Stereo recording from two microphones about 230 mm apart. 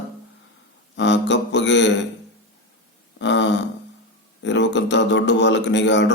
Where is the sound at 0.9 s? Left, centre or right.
Left.